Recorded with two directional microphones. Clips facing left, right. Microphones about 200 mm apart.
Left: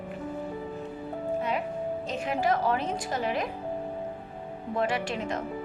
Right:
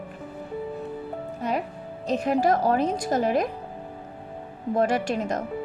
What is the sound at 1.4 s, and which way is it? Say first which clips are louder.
Music: right 4 dB; 40° right (ahead or behind).